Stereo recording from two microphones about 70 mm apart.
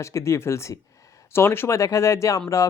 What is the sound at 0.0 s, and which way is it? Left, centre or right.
Speech, left.